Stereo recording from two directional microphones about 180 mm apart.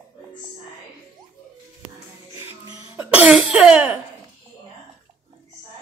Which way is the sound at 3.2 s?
5° right (ahead or behind).